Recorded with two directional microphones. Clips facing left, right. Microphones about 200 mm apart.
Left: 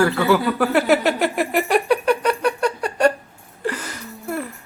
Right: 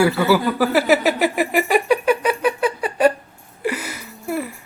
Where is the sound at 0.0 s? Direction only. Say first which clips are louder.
Right 1 dB; 5° right (ahead or behind).